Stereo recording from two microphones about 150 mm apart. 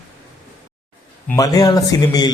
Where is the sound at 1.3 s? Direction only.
25° left (ahead or behind).